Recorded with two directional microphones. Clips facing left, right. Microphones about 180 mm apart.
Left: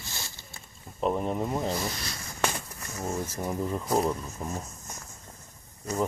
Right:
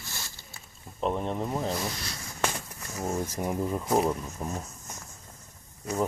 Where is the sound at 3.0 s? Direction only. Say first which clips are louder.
Right 2 dB; 15° right (ahead or behind).